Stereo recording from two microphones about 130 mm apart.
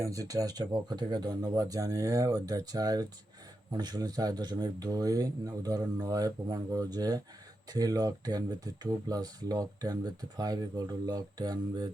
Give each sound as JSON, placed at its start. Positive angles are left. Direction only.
{"t": 0.0, "sound": "speech", "side_deg": -25}